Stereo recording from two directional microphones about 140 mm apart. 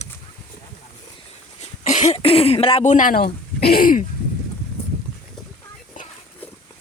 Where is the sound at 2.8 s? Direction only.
65° left (ahead or behind); by 4.0 s 90° left.